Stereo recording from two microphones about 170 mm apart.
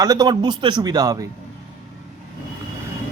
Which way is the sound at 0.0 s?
25° right (ahead or behind).